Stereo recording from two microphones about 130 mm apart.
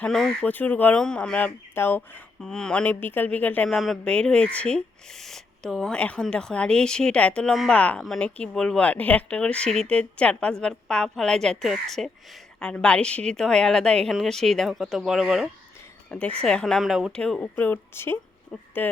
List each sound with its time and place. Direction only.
0.0 s speech: 5° left (ahead or behind)
3.7 s a woman's voice: centre (ahead or behind)
16.0 s a woman's voice: 10° left (ahead or behind)